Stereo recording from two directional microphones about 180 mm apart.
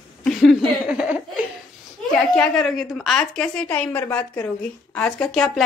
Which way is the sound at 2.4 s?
Centre (ahead or behind).